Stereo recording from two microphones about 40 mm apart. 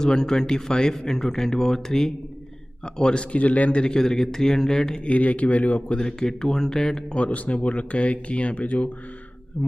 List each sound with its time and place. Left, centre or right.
0.0 s a man's voice: centre
3.3 s speech: left
3.8 s a man's voice: centre
5.0 s speech: left
5.9 s a man's voice: centre
7.2 s speech: left
9.6 s a man's voice: centre